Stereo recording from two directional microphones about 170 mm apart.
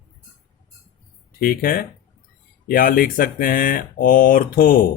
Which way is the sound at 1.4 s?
55° left (ahead or behind).